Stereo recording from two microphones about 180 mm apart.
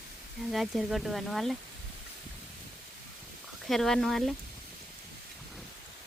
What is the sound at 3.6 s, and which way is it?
Speech, centre (ahead or behind).